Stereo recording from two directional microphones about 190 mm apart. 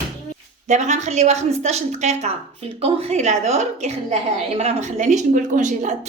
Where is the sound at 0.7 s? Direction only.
40° right (ahead or behind).